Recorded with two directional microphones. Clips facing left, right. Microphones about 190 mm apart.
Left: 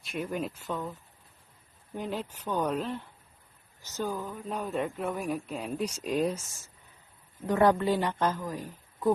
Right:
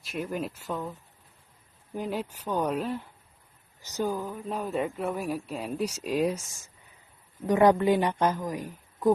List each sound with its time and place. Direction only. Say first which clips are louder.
0.0 s speech: right 1 dB; centre (ahead or behind)
2.0 s speech: right 3 dB; 10° right (ahead or behind)
7.4 s a woman's voice: right 3 dB; 15° right (ahead or behind)